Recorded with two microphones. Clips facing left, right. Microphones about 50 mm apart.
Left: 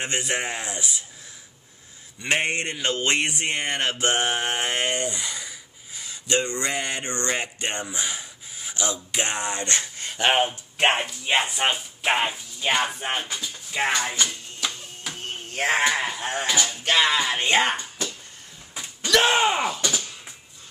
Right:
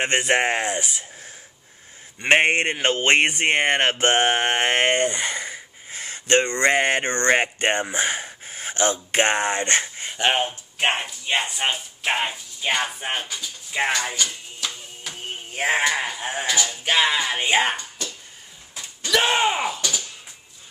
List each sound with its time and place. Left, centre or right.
0.0 s speech: right
2.2 s speech: right
10.1 s speech: centre
13.7 s a sound: centre
15.0 s a sound: centre
15.8 s groan: centre
16.6 s music: centre
19.0 s groan: centre